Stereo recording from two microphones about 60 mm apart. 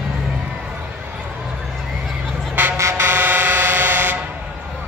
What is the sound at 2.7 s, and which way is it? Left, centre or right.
Vehicle, right.